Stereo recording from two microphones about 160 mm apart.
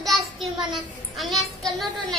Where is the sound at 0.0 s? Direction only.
Centre (ahead or behind).